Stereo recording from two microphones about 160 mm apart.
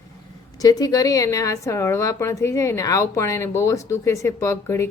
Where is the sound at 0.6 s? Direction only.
25° left (ahead or behind).